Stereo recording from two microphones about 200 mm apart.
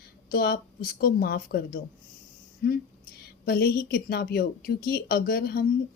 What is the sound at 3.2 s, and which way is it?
A woman's voice, 50° left (ahead or behind).